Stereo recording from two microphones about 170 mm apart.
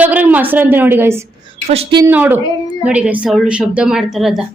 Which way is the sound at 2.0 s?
10° right (ahead or behind).